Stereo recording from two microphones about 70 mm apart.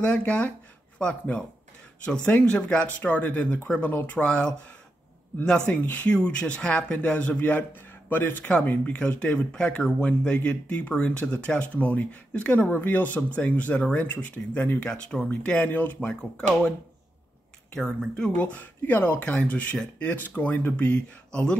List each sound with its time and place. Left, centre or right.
0.0 s speech: centre
4.2 s speech: centre
5.7 s speech: left
15.6 s speech: left
16.2 s speech: centre
18.1 s speech: centre
21.3 s speech: centre